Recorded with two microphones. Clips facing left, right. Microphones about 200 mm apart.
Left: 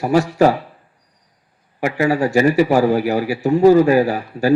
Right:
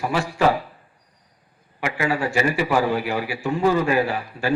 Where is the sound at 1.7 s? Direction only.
40° left (ahead or behind).